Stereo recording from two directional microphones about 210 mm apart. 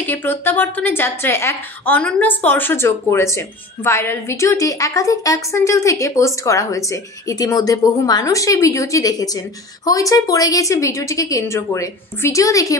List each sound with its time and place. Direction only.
0.0 s a woman's voice: 10° left (ahead or behind)